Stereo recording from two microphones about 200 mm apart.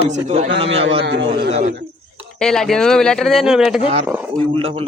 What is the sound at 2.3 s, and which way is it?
Speech, 5° left (ahead or behind).